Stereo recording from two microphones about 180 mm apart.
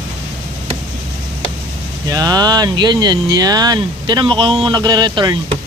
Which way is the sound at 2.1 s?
20° right (ahead or behind).